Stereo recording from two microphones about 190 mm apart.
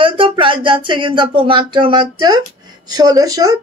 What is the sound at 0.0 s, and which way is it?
A woman's voice, 25° right (ahead or behind).